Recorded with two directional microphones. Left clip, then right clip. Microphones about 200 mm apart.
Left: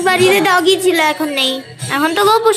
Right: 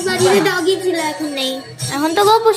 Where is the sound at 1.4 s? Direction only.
5° right (ahead or behind).